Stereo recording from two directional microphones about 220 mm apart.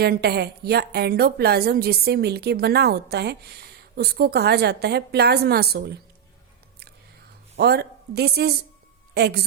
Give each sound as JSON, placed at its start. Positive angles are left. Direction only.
{"t": 0.0, "sound": "a woman's voice", "side_deg": -45}
{"t": 7.5, "sound": "a woman's voice", "side_deg": -45}